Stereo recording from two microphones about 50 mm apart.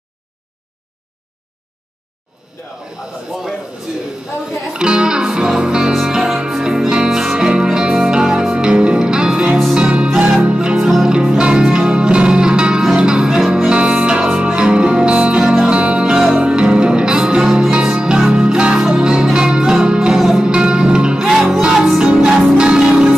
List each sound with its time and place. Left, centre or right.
4.7 s music: centre
10.8 s music: centre
15.4 s music: centre
15.7 s music: right